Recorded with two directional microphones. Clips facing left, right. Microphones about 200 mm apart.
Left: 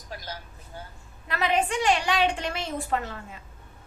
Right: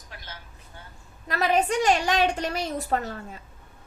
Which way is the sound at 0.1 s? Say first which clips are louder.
Left 7 dB; 40° left (ahead or behind).